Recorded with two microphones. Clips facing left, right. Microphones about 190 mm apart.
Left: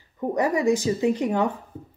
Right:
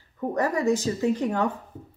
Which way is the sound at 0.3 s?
15° left (ahead or behind).